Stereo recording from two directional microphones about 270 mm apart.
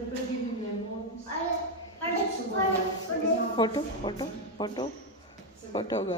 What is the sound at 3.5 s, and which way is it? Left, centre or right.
A woman's voice, centre.